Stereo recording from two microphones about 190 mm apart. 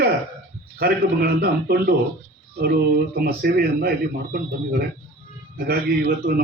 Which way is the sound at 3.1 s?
55° right (ahead or behind).